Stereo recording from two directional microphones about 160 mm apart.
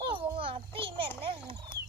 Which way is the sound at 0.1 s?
35° right (ahead or behind).